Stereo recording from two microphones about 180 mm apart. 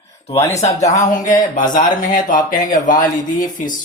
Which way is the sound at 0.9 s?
45° left (ahead or behind).